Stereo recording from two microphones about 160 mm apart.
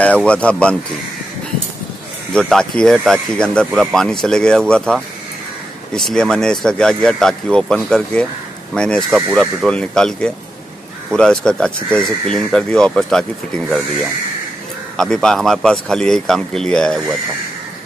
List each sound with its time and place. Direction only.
0.0 s speech: 5° left (ahead or behind)
2.3 s speech: 5° left (ahead or behind)
15.0 s speech: 5° left (ahead or behind)